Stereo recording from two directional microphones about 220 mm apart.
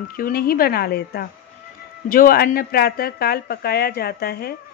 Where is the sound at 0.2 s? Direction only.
45° left (ahead or behind).